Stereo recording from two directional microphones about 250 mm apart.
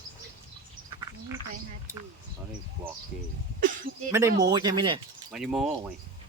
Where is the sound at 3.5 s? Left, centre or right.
Right.